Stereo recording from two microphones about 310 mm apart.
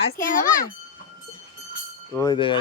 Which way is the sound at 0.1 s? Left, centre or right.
Left.